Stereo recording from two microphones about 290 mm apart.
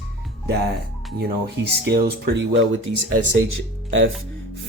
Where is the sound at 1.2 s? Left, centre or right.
Right.